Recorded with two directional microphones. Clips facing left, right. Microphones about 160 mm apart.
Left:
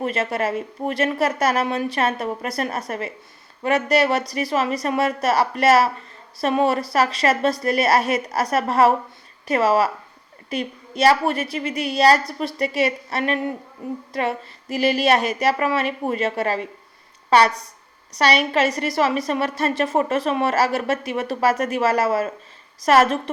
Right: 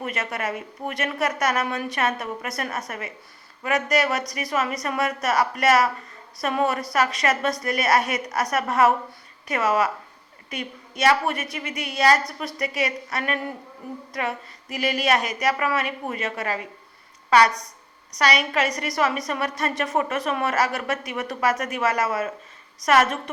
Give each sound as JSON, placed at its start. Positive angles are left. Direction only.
{"t": 0.0, "sound": "a woman's voice", "side_deg": 30}